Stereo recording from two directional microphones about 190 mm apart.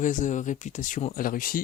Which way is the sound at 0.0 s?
40° left (ahead or behind).